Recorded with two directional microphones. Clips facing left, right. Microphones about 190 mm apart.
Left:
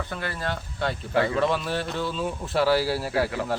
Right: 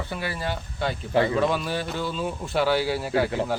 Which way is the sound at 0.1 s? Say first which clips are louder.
Right 1 dB; 10° right (ahead or behind).